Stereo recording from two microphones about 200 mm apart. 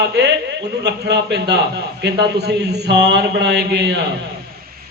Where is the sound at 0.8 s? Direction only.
55° right (ahead or behind).